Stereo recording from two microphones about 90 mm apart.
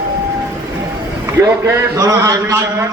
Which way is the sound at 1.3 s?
30° right (ahead or behind).